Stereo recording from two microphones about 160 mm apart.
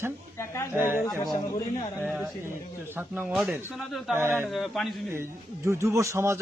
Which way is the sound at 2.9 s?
10° right (ahead or behind).